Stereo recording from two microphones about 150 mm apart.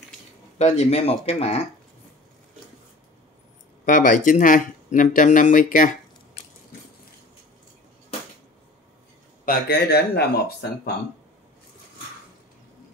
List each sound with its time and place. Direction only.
0.6 s speech: 45° left (ahead or behind)
3.8 s speech: 60° left (ahead or behind)
9.5 s speech: 90° left